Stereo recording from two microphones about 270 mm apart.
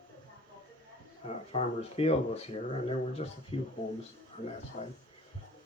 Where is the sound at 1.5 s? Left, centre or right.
Left.